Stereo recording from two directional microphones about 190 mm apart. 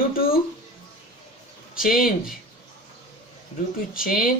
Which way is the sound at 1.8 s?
50° left (ahead or behind).